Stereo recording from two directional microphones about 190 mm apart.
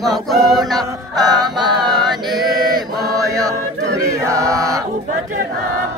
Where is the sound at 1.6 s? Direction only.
Centre (ahead or behind).